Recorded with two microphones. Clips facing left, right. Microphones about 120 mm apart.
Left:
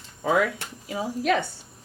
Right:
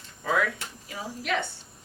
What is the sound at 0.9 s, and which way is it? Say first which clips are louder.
Speech: left 10 dB; 25° left (ahead or behind).